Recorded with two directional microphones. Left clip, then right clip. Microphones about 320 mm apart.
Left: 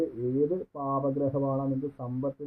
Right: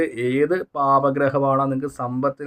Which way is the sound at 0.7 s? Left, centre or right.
Right.